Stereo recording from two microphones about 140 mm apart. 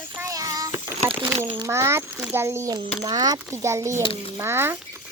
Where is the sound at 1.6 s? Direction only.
20° right (ahead or behind).